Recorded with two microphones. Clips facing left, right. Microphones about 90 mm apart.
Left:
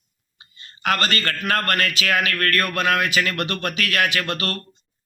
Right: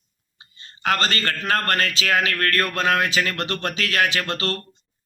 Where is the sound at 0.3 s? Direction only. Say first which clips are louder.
Even; 25° right (ahead or behind).